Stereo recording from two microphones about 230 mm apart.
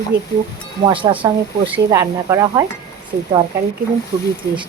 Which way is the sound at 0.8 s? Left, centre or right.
Right.